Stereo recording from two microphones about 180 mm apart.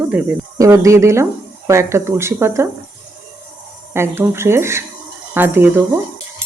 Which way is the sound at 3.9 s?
15° right (ahead or behind).